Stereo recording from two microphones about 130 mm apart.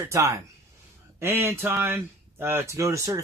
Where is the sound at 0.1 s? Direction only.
20° right (ahead or behind).